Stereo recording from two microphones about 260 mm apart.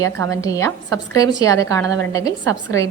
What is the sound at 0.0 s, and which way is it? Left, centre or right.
A woman's voice, centre.